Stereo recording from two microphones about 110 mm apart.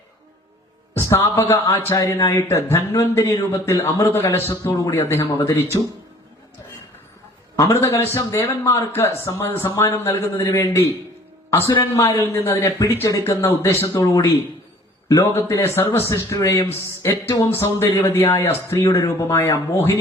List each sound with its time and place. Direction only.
0.9 s a man's voice: 25° left (ahead or behind)
7.5 s a man's voice: 25° left (ahead or behind)
11.9 s a man's voice: 25° left (ahead or behind)